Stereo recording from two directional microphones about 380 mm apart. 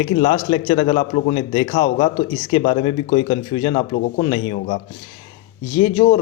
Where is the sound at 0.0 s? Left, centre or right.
Centre.